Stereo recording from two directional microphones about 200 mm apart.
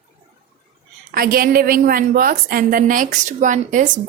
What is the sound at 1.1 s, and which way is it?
Speech, 45° right (ahead or behind).